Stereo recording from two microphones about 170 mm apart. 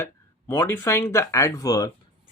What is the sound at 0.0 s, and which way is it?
Speech, 15° left (ahead or behind).